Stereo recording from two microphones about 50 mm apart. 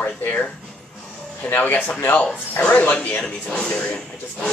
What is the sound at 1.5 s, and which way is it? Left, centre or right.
Speech, left.